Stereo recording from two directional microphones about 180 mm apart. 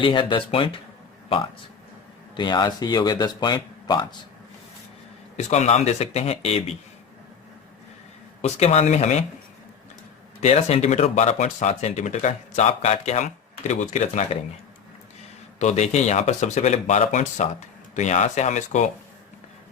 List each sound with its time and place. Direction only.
0.0 s speech: 30° left (ahead or behind)
2.3 s speech: 25° left (ahead or behind)
5.4 s speech: 40° left (ahead or behind)
8.4 s speech: 35° left (ahead or behind)
10.4 s speech: 35° left (ahead or behind)
15.5 s speech: 40° left (ahead or behind)